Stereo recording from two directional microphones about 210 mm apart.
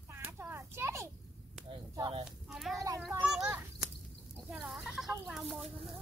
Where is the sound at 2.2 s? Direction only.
Centre (ahead or behind).